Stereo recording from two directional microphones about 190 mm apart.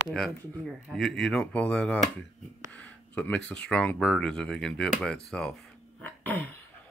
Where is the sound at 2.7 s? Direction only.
5° left (ahead or behind).